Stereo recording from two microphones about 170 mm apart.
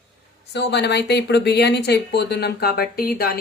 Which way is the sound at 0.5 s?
80° left.